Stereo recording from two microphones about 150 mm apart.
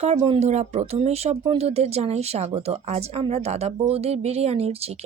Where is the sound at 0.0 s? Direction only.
40° right (ahead or behind).